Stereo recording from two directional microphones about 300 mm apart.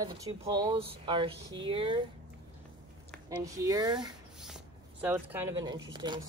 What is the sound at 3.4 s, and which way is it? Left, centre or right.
Speech, centre.